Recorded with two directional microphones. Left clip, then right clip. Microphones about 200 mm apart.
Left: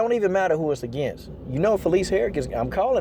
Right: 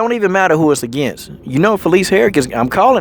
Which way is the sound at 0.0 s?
40° right (ahead or behind).